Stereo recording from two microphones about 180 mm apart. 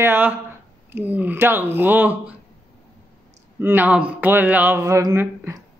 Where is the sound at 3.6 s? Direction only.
10° right (ahead or behind).